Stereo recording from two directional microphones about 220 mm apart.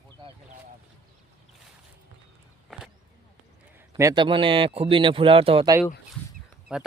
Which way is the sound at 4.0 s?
15° right (ahead or behind).